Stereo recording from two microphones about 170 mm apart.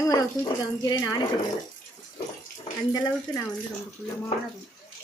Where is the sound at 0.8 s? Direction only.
20° left (ahead or behind).